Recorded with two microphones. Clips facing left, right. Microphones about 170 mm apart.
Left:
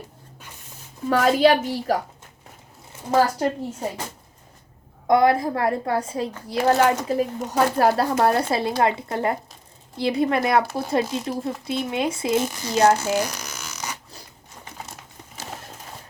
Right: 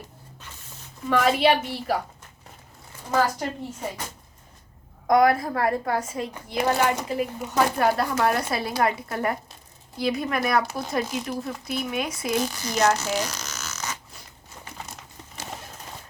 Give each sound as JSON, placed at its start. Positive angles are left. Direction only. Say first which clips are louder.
{"t": 1.1, "sound": "speech", "louder": "left 3 dB", "side_deg": 40}
{"t": 3.1, "sound": "speech", "louder": "left 4 dB", "side_deg": 35}
{"t": 5.0, "sound": "a woman's voice", "louder": "left 1 dB", "side_deg": 25}
{"t": 13.0, "sound": "a sound", "louder": "left 4 dB", "side_deg": 10}